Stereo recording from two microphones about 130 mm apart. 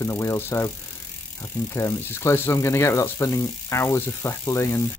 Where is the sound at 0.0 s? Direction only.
20° left (ahead or behind).